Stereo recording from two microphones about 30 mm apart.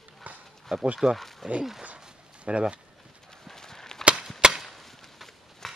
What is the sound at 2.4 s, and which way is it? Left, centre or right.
Speech, right.